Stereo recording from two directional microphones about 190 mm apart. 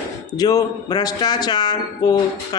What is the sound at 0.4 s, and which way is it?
Speech, 20° left (ahead or behind).